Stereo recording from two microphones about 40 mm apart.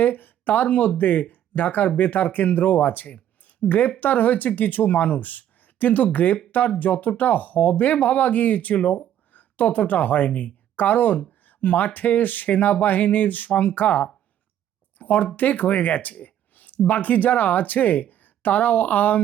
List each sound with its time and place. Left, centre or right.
0.0 s speech: left